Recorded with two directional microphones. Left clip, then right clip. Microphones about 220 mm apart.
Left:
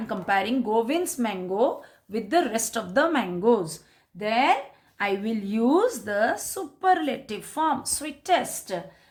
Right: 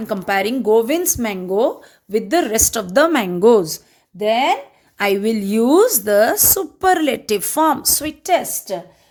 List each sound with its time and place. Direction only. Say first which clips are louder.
0.1 s a woman's voice: right 6 dB; 45° right (ahead or behind)